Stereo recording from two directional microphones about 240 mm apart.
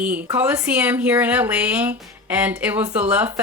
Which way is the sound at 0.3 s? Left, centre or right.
Centre.